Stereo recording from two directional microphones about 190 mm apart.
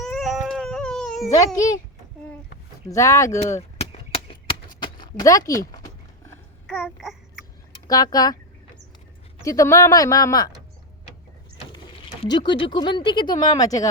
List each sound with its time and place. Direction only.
0.0 s baby cry: centre (ahead or behind)
1.5 s speech: 20° left (ahead or behind)
2.9 s speech: 15° left (ahead or behind)
3.8 s a sound: 30° left (ahead or behind)
6.2 s babbling: 5° left (ahead or behind)
7.9 s speech: 20° left (ahead or behind)
9.4 s speech: 15° left (ahead or behind)
12.2 s speech: 25° left (ahead or behind)